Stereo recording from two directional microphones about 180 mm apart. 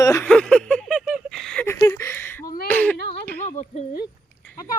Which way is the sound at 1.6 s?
15° left (ahead or behind).